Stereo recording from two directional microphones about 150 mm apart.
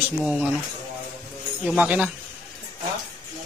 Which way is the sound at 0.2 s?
5° right (ahead or behind).